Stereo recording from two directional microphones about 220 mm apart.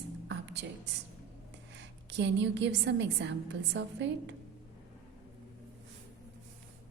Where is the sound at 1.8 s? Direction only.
55° right (ahead or behind).